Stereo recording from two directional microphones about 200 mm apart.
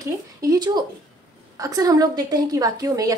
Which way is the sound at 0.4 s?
20° right (ahead or behind).